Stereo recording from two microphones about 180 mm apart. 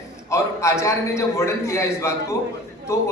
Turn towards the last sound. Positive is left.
turn(degrees=15)  # may be behind; listen again after turning